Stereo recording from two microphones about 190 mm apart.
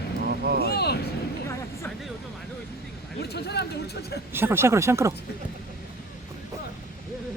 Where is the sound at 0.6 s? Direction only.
60° left (ahead or behind).